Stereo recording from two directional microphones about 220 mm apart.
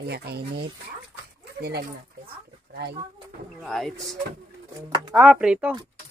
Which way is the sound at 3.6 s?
Centre (ahead or behind).